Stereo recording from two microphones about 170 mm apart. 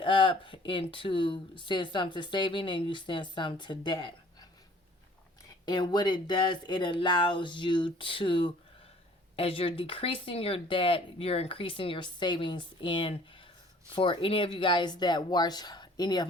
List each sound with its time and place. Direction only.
0.0 s speech: 30° left (ahead or behind)
5.6 s speech: 25° left (ahead or behind)